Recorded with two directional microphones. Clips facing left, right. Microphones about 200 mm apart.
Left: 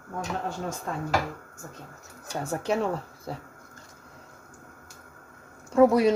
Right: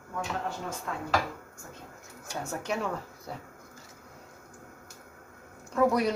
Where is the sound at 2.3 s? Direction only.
30° left (ahead or behind).